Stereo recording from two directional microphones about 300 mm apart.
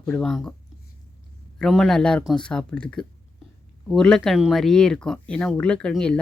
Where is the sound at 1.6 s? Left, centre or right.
Centre.